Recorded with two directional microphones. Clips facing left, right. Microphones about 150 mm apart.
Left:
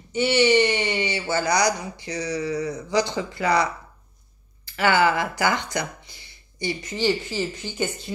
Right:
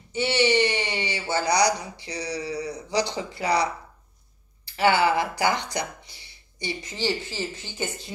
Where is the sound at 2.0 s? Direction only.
50° left (ahead or behind).